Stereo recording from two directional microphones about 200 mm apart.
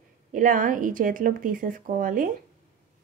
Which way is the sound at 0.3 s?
40° right (ahead or behind).